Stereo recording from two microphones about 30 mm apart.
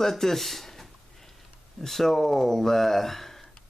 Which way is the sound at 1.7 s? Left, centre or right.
Centre.